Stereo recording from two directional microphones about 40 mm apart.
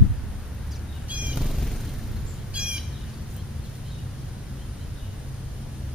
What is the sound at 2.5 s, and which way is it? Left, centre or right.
Bird, right.